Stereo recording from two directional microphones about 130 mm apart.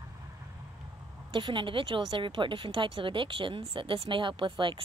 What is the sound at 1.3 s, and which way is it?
A woman's voice, 40° right (ahead or behind).